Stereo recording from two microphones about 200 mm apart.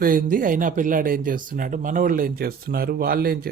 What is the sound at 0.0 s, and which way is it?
Speech, 45° right (ahead or behind).